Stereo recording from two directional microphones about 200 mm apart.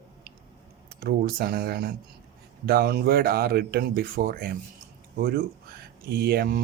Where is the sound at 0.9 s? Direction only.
55° right (ahead or behind).